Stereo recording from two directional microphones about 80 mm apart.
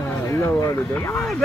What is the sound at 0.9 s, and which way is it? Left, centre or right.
Speech, left.